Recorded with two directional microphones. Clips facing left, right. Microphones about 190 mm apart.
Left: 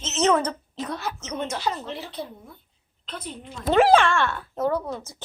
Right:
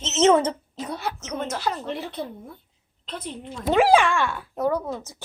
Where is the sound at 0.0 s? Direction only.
20° right (ahead or behind).